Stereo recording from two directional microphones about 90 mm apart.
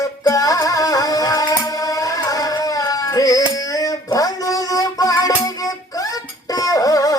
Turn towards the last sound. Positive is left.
turn(degrees=40)  # may be behind; listen again after turning